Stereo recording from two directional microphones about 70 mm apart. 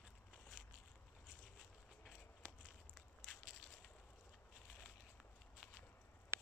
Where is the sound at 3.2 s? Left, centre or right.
Centre.